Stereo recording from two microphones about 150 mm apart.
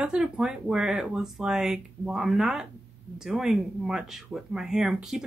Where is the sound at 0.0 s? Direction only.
5° right (ahead or behind).